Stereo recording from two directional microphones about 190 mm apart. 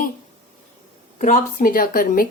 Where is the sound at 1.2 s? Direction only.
45° left (ahead or behind).